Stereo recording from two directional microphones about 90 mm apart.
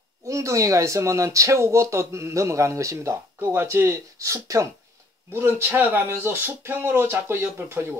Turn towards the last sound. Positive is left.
turn(degrees=-30)  # may be behind; listen again after turning